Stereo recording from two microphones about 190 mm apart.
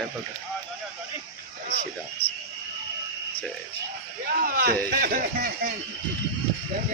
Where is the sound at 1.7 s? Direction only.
55° left (ahead or behind).